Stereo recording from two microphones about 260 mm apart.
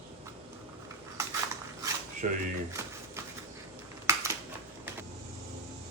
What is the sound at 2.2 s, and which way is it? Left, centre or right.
Speech, right.